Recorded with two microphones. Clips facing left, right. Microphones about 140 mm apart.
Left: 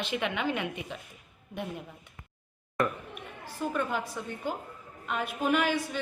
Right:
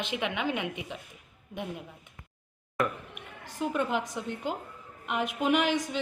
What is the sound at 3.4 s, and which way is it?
A woman's voice, 15° right (ahead or behind).